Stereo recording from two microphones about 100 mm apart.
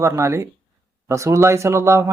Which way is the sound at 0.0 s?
30° right (ahead or behind).